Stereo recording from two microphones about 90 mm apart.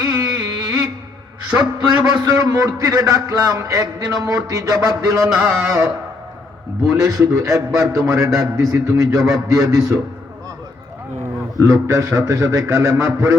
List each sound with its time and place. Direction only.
0.0 s a sound: 40° right (ahead or behind)
2.1 s a man's voice: 45° right (ahead or behind)
6.9 s a man's voice: 40° right (ahead or behind)
11.6 s a man's voice: 35° right (ahead or behind)